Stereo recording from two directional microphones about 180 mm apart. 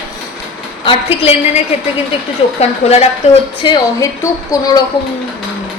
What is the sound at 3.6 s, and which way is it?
A woman's voice, 20° left (ahead or behind).